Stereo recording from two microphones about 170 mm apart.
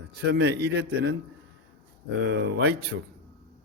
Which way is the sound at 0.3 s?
90° right.